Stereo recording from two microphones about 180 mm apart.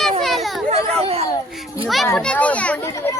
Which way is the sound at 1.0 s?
35° right (ahead or behind).